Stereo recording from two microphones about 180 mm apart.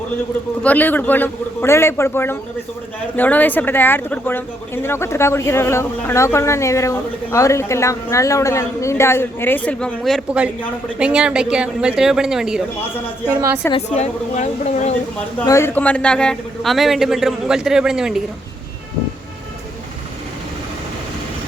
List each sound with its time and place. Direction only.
0.6 s a man's voice: 10° left (ahead or behind)
13.7 s a woman's voice: 35° left (ahead or behind)
15.4 s a man's voice: 15° left (ahead or behind); by 18.2 s 5° right (ahead or behind)